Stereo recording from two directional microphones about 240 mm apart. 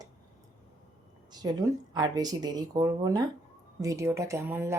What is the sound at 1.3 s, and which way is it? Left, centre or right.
Speech, centre.